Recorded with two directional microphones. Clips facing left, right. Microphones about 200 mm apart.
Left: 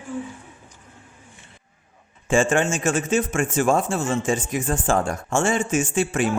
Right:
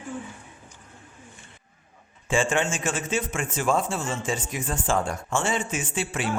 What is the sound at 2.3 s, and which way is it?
A man's voice, 45° left (ahead or behind).